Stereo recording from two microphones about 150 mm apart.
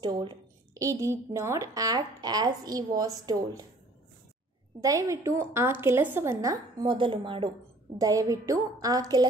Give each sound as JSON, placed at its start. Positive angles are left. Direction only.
{"t": 0.0, "sound": "a woman's voice", "side_deg": -30}
{"t": 4.7, "sound": "a woman's voice", "side_deg": -20}
{"t": 8.0, "sound": "a woman's voice", "side_deg": -20}